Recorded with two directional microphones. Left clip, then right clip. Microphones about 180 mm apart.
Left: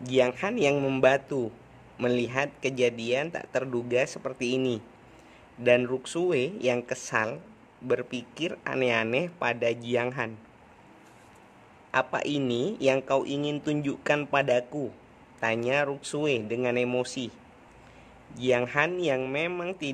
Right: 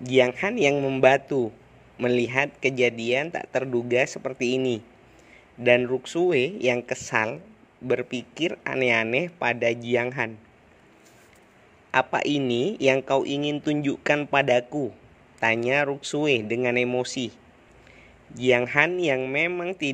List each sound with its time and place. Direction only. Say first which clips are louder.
0.0 s speech: right 4 dB; 20° right (ahead or behind)
0.7 s a man's voice: right 2 dB; 10° right (ahead or behind)
1.0 s speech: right 5 dB; 20° right (ahead or behind)
11.9 s speech: right 4 dB; 25° right (ahead or behind)